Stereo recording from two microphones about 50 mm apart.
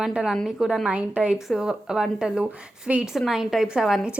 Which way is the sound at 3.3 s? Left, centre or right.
Centre.